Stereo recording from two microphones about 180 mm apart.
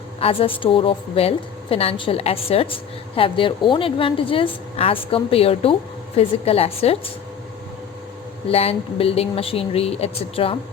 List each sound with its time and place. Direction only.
0.2 s a woman's voice: 30° left (ahead or behind)
8.4 s a woman's voice: 35° left (ahead or behind)